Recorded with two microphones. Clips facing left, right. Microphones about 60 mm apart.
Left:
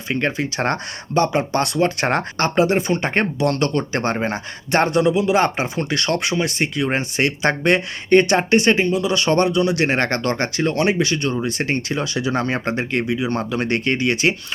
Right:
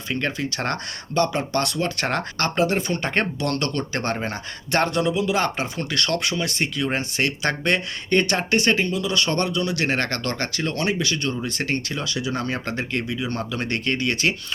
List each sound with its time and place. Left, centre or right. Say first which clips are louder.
0.1 s speech: left 4 dB; left